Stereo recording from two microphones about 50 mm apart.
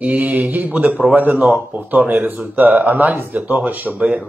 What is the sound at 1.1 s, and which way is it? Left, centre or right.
Speech, right.